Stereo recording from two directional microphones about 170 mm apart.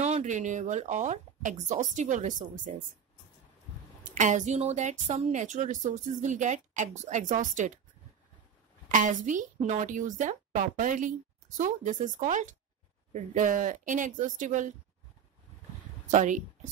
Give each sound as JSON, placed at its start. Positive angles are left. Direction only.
{"t": 0.0, "sound": "a woman's voice", "side_deg": -45}
{"t": 4.0, "sound": "a woman's voice", "side_deg": -45}
{"t": 8.8, "sound": "a woman's voice", "side_deg": -50}
{"t": 16.1, "sound": "a woman's voice", "side_deg": -45}